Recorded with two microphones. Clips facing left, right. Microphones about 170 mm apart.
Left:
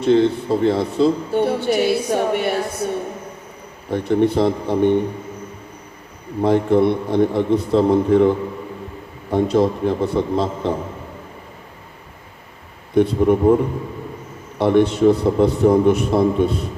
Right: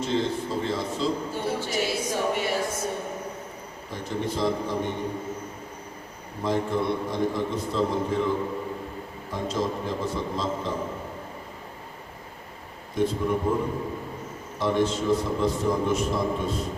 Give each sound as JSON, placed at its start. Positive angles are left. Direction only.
{"t": 0.0, "sound": "speech", "side_deg": 65}
{"t": 6.4, "sound": "speech", "side_deg": 60}
{"t": 12.9, "sound": "speech", "side_deg": 65}
{"t": 14.6, "sound": "speech", "side_deg": 65}